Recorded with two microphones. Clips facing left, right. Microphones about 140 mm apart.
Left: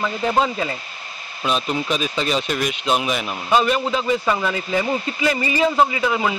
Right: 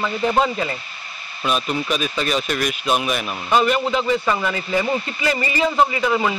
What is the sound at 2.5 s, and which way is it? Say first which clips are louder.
Speech: even; 20° left (ahead or behind).